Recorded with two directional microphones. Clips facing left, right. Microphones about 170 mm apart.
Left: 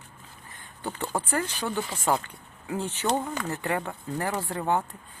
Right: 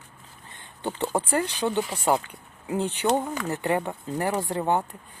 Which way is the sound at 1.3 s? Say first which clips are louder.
Right 3 dB; 20° right (ahead or behind).